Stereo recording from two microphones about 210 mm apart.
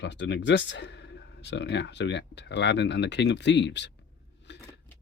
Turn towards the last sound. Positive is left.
turn(degrees=55)  # may be behind; listen again after turning